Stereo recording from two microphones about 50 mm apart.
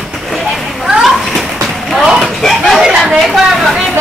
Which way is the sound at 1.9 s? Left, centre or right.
Centre.